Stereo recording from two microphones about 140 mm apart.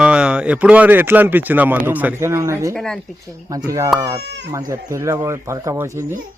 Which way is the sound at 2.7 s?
5° left (ahead or behind).